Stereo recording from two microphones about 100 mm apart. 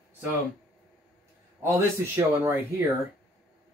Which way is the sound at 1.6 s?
30° right (ahead or behind).